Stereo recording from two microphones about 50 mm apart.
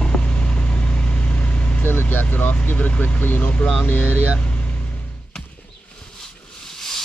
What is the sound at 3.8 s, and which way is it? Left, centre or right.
Speech, left.